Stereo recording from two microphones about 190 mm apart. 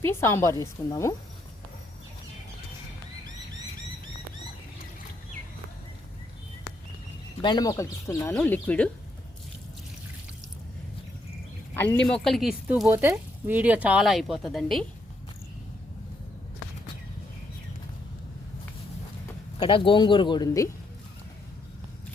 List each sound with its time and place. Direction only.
0.0 s speech: 10° left (ahead or behind)
7.4 s speech: 20° left (ahead or behind)
12.1 s speech: centre (ahead or behind)
19.5 s speech: 25° left (ahead or behind)